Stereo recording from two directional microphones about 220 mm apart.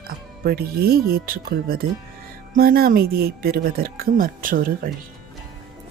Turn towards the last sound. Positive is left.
turn(degrees=-40)  # may be behind; listen again after turning